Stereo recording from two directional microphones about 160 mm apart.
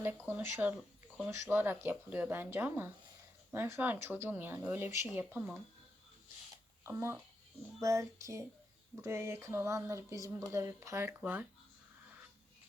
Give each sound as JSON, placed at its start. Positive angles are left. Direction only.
{"t": 0.0, "sound": "speech", "side_deg": -15}
{"t": 6.8, "sound": "speech", "side_deg": -15}
{"t": 7.8, "sound": "child singing", "side_deg": -20}
{"t": 9.0, "sound": "speech", "side_deg": -15}